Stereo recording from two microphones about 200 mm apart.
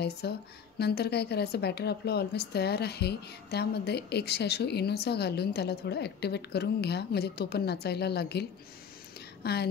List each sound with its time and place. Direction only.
0.2 s speech: 55° left (ahead or behind)